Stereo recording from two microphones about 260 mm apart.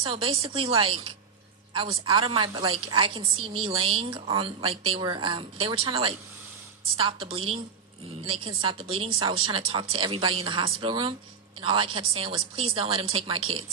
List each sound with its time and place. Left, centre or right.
0.0 s a woman's voice: right